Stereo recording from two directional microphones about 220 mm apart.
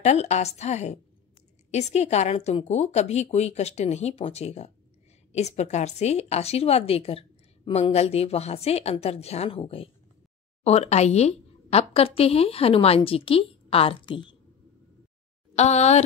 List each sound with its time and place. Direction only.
0.0 s a woman's voice: 30° left (ahead or behind)
15.5 s a woman's voice: 30° left (ahead or behind)